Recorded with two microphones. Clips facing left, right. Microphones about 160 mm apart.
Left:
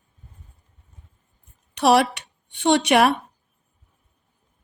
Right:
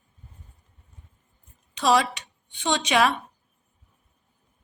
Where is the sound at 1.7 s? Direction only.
65° left (ahead or behind).